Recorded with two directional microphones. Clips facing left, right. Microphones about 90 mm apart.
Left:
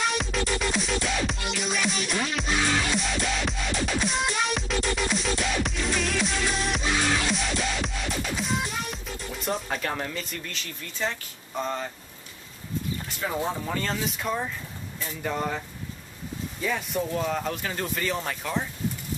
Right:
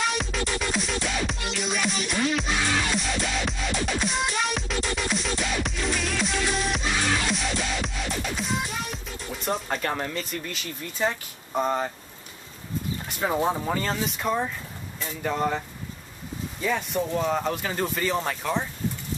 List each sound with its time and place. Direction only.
0.0 s music: centre (ahead or behind)
8.4 s speech: centre (ahead or behind)
11.5 s speech: 25° right (ahead or behind)
13.2 s speech: 20° right (ahead or behind)
13.7 s speech: 5° right (ahead or behind)
16.6 s speech: centre (ahead or behind)